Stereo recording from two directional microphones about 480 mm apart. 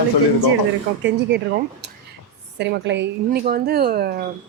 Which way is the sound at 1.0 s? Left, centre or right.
Right.